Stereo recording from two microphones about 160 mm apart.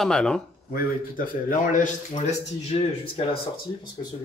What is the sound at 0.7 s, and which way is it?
A man's voice, 60° left (ahead or behind).